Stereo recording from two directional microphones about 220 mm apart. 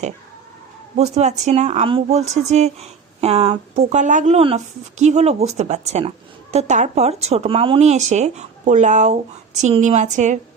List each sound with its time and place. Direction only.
0.9 s speech: 30° right (ahead or behind)